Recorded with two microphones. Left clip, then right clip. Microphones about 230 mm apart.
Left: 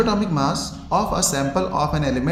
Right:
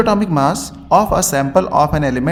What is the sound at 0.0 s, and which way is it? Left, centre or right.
Speech, right.